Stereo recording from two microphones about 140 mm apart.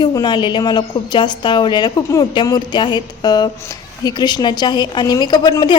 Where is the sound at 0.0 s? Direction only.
30° left (ahead or behind).